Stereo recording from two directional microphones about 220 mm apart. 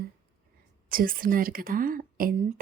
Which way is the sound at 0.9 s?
40° right (ahead or behind).